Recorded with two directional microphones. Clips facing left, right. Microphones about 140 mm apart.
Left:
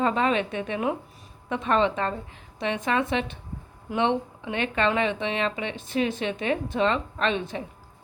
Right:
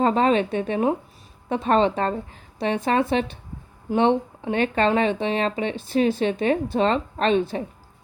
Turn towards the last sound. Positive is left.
turn(degrees=-35)  # may be behind; listen again after turning